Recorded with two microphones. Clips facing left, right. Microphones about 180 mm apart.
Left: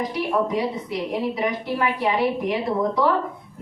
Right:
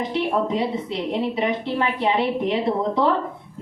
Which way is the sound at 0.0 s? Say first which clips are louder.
Right 1 dB; 25° right (ahead or behind).